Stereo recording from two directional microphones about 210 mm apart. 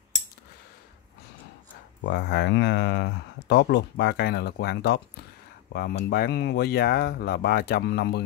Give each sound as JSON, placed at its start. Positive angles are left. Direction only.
{"t": 2.0, "sound": "speech", "side_deg": 55}